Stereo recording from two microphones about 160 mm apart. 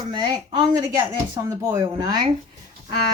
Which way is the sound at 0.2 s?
25° right (ahead or behind).